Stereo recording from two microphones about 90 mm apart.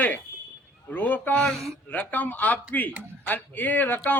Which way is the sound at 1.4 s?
5° left (ahead or behind).